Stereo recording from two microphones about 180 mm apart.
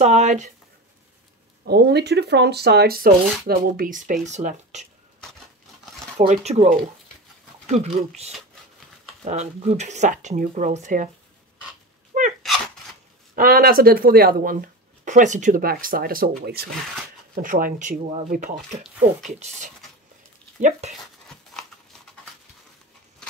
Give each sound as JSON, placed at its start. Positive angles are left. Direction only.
{"t": 0.0, "sound": "speech", "side_deg": -40}
{"t": 1.7, "sound": "speech", "side_deg": -65}
{"t": 6.1, "sound": "speech", "side_deg": -40}
{"t": 12.1, "sound": "sneeze", "side_deg": -45}
{"t": 13.4, "sound": "speech", "side_deg": -55}
{"t": 20.8, "sound": "speech", "side_deg": -40}
{"t": 21.5, "sound": "a sound", "side_deg": 5}